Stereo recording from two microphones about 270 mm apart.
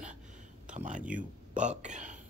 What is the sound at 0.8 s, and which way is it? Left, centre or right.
Speech, right.